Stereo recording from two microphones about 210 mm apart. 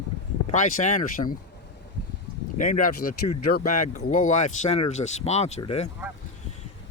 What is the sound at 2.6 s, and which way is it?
Speech, 40° left (ahead or behind).